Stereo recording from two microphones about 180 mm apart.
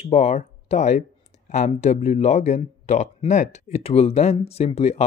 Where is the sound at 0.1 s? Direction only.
40° left (ahead or behind).